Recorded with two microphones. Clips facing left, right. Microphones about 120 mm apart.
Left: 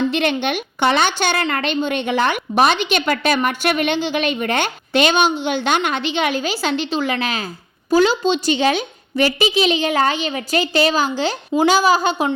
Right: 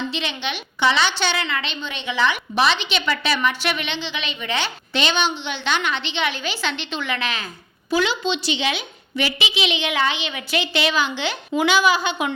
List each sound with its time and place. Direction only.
0.1 s a woman's voice: 55° left (ahead or behind)